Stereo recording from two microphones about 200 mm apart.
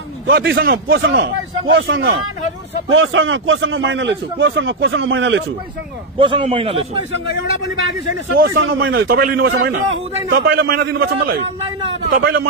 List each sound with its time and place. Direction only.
0.3 s a man's voice: 55° right (ahead or behind)
6.1 s a man's voice: 25° right (ahead or behind)
8.5 s a man's voice: 75° right (ahead or behind)
9.1 s a man's voice: 50° right (ahead or behind)
11.9 s a man's voice: 70° right (ahead or behind)